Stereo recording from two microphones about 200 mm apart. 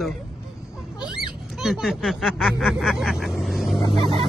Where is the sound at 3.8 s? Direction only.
25° right (ahead or behind).